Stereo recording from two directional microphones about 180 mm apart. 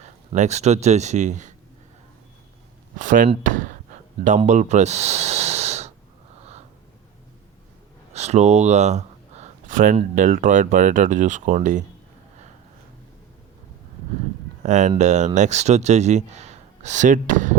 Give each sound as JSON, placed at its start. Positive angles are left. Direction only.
{"t": 0.0, "sound": "speech", "side_deg": -40}
{"t": 3.0, "sound": "speech", "side_deg": -50}
{"t": 3.4, "sound": "a sound", "side_deg": -45}
{"t": 4.4, "sound": "snort", "side_deg": -40}
{"t": 8.1, "sound": "speech", "side_deg": -35}
{"t": 14.6, "sound": "speech", "side_deg": -40}